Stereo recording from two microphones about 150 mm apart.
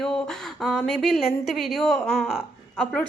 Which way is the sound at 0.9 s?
Centre (ahead or behind).